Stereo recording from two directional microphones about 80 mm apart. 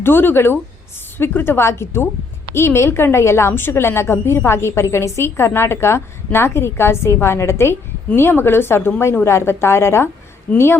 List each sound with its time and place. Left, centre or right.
0.0 s a woman's voice: left